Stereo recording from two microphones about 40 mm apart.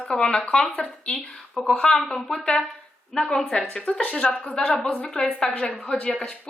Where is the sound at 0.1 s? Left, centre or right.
Centre.